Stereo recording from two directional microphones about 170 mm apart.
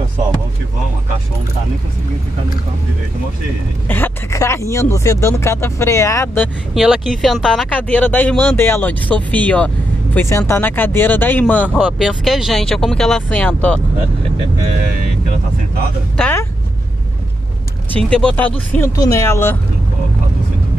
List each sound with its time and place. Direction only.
3.9 s speech: 15° left (ahead or behind)
6.7 s speech: centre (ahead or behind)
16.2 s speech: 10° left (ahead or behind)
17.9 s speech: 5° left (ahead or behind)
18.9 s speech: 20° left (ahead or behind)